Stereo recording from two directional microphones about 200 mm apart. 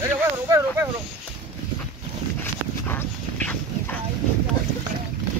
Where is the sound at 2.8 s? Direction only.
10° left (ahead or behind).